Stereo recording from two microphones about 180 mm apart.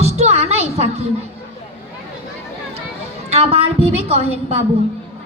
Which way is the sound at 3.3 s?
35° right (ahead or behind).